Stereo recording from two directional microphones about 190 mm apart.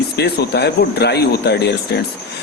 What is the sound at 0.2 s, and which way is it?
Speech, 60° left (ahead or behind).